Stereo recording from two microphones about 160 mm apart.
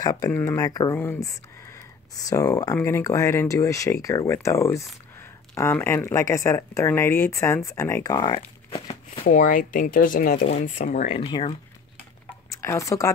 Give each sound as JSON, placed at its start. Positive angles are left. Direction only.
{"t": 0.0, "sound": "speech", "side_deg": 20}
{"t": 8.4, "sound": "speech", "side_deg": 40}
{"t": 9.2, "sound": "speech", "side_deg": 60}
{"t": 11.1, "sound": "speech", "side_deg": 30}
{"t": 12.5, "sound": "speech", "side_deg": 20}